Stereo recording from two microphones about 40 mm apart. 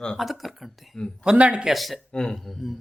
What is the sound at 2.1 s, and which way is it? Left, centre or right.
Speech, centre.